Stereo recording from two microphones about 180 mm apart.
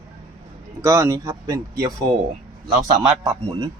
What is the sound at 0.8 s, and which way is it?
Speech, 15° right (ahead or behind).